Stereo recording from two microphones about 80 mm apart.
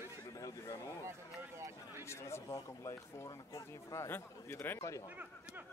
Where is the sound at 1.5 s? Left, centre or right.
Right.